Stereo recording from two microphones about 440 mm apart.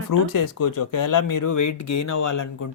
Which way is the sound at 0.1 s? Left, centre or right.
Left.